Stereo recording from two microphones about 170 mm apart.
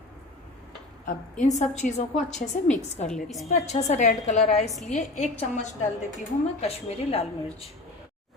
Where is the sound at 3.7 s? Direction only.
40° left (ahead or behind).